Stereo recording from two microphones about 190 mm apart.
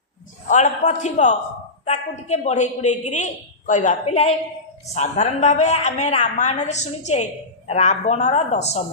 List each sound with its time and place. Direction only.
0.4 s a woman's voice: 40° left (ahead or behind)